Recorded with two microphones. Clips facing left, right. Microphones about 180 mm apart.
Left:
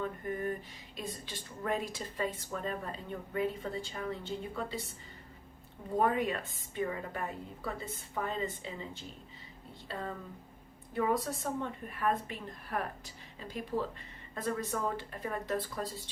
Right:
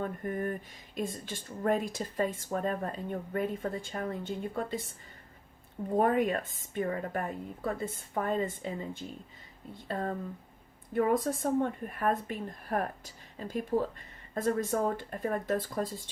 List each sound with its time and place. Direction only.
0.0 s speech: 50° right (ahead or behind)
6.0 s speech: 45° right (ahead or behind)